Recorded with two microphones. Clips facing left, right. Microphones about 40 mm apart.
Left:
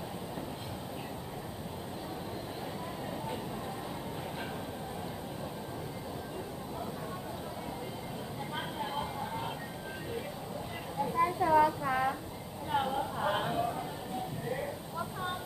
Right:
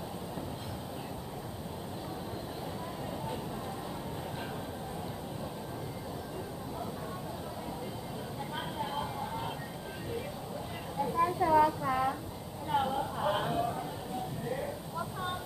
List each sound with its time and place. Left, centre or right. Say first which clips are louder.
8.9 s music: even; centre
11.2 s child singing: even; centre
12.6 s a sound: right 1 dB; centre